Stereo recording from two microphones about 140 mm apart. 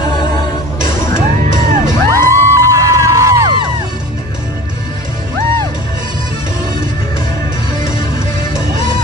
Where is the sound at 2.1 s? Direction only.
20° right (ahead or behind).